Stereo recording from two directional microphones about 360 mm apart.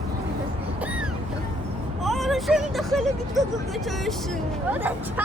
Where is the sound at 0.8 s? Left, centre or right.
Centre.